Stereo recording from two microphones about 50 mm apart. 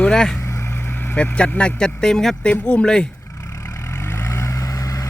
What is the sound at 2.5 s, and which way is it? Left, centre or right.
Speech, left.